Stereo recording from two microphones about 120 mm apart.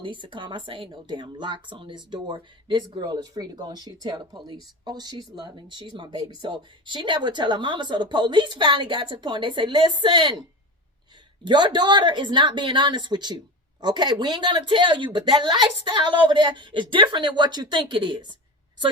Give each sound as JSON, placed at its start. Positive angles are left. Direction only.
{"t": 0.0, "sound": "speech", "side_deg": -40}
{"t": 11.4, "sound": "speech", "side_deg": -40}